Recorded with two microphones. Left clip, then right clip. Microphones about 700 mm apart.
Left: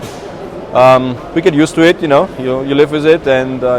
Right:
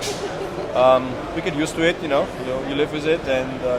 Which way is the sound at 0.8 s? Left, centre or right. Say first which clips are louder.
Left 8 dB; left.